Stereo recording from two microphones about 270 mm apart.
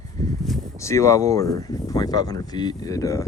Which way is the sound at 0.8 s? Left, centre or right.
Centre.